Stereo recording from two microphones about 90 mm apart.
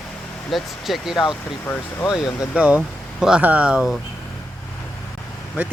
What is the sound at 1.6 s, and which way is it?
Speech, 25° left (ahead or behind).